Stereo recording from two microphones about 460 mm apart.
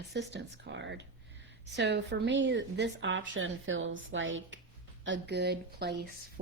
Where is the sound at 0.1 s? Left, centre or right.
Right.